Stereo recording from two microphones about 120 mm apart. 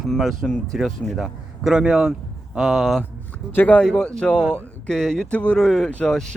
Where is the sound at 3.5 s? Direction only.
15° left (ahead or behind).